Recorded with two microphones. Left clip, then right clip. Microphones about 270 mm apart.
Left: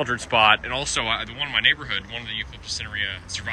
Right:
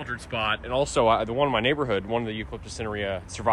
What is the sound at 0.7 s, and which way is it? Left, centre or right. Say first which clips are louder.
Speech: right 3 dB; centre.